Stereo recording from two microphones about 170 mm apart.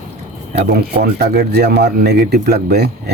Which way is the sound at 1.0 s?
65° right (ahead or behind).